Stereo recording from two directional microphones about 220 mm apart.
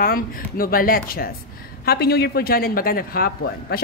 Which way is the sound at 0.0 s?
40° left (ahead or behind).